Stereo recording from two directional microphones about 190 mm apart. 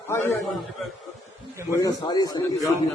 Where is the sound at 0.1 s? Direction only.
15° left (ahead or behind).